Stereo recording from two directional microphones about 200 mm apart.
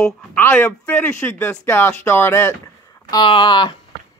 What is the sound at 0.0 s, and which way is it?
Speech, 10° left (ahead or behind).